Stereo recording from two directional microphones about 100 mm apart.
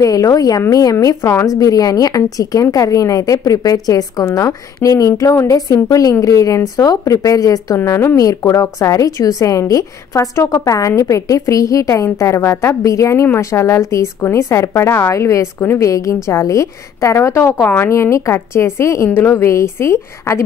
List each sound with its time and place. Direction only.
0.0 s a woman's voice: 35° left (ahead or behind)